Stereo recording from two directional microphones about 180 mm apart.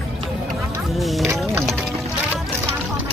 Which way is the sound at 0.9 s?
Centre (ahead or behind).